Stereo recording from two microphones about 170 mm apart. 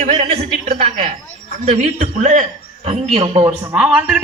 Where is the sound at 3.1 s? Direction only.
30° right (ahead or behind).